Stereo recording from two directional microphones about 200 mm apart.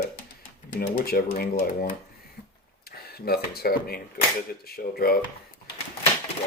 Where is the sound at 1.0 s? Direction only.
50° left (ahead or behind).